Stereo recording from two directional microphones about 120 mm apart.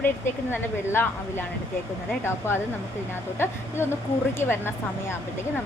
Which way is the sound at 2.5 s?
20° left (ahead or behind).